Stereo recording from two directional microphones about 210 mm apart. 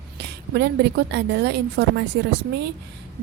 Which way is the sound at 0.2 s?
50° right (ahead or behind).